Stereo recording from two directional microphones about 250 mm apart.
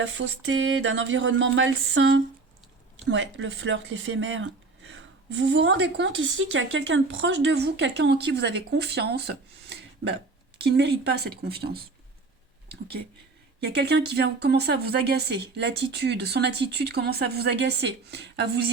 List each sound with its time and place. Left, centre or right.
0.0 s speech: right
13.6 s speech: right